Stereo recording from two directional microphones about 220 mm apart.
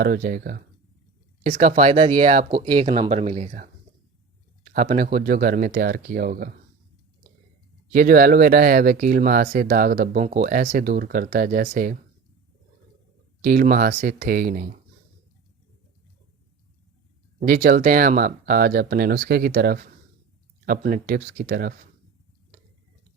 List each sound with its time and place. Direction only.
0.0 s speech: 40° right (ahead or behind)
7.9 s speech: 40° right (ahead or behind)
13.4 s speech: 40° right (ahead or behind)
17.4 s speech: 40° right (ahead or behind)